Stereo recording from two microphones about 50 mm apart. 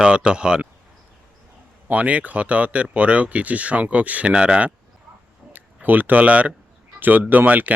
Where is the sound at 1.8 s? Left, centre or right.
Right.